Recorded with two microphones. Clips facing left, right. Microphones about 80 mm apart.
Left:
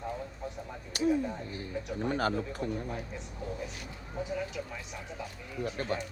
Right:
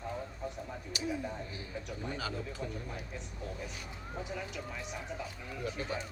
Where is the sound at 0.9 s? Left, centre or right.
Left.